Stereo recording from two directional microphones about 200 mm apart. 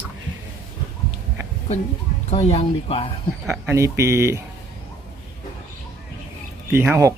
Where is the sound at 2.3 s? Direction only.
30° left (ahead or behind).